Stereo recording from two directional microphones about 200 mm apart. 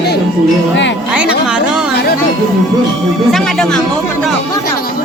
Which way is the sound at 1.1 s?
5° right (ahead or behind).